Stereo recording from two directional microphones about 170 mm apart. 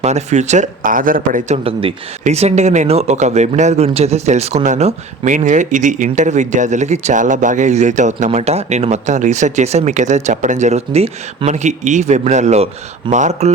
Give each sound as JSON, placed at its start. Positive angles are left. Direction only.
{"t": 0.0, "sound": "speech", "side_deg": -40}
{"t": 1.6, "sound": "speech", "side_deg": -35}